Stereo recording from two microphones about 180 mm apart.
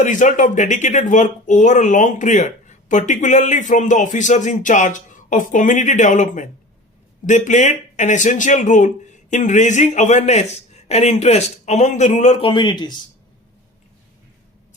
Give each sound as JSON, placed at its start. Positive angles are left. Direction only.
{"t": 0.0, "sound": "speech", "side_deg": 45}